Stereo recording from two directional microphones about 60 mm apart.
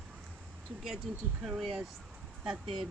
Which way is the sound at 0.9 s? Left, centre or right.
Centre.